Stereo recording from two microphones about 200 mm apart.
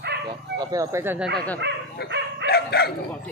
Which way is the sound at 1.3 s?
5° left (ahead or behind).